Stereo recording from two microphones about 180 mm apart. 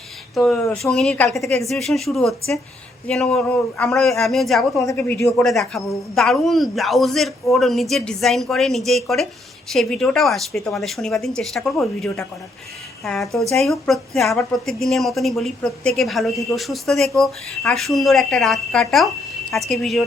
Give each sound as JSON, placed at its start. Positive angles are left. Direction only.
{"t": 0.3, "sound": "a woman's voice", "side_deg": 0}
{"t": 4.9, "sound": "a woman's voice", "side_deg": 10}